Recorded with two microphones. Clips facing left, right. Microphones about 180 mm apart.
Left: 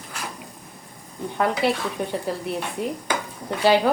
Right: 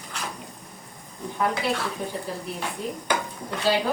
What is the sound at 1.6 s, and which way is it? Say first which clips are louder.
Speech: left 5 dB; 70° left (ahead or behind).